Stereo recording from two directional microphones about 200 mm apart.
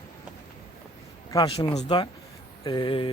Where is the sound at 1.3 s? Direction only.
20° left (ahead or behind).